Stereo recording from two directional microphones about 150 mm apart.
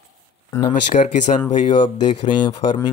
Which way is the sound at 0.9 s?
55° left (ahead or behind).